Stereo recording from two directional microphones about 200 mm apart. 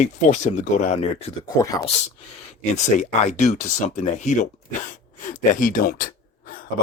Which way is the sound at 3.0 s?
35° left (ahead or behind).